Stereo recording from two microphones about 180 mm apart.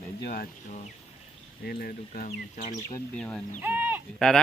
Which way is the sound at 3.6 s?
10° right (ahead or behind).